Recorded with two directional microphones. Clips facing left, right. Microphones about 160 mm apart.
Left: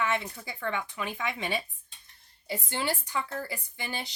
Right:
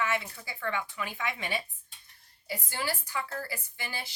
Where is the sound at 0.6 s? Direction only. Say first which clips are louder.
Left 1 dB; 20° left (ahead or behind).